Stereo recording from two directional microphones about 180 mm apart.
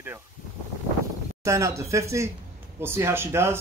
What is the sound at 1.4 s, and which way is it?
Speech, 15° right (ahead or behind).